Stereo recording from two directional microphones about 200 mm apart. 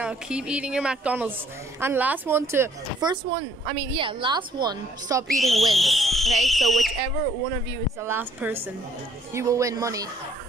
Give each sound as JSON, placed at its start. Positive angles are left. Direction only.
{"t": 0.0, "sound": "speech", "side_deg": -5}
{"t": 5.3, "sound": "speech", "side_deg": 0}
{"t": 8.0, "sound": "speech", "side_deg": -10}